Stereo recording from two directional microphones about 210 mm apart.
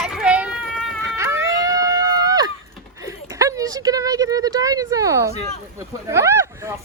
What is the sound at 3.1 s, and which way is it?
Speech, 15° right (ahead or behind).